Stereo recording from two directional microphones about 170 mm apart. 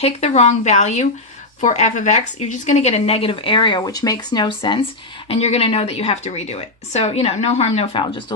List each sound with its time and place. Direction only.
0.0 s speech: 40° left (ahead or behind)